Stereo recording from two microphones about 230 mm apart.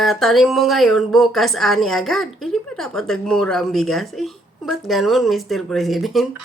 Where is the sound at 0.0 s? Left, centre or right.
Centre.